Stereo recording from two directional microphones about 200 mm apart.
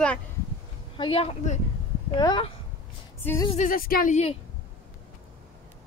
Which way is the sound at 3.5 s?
40° left (ahead or behind).